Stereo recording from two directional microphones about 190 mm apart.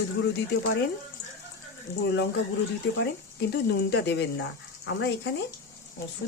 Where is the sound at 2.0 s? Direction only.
65° left (ahead or behind).